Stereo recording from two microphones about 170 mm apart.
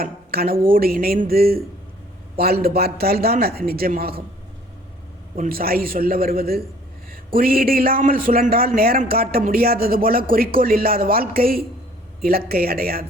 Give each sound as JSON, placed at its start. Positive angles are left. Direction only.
{"t": 0.0, "sound": "a man's voice", "side_deg": -60}
{"t": 5.4, "sound": "a man's voice", "side_deg": -60}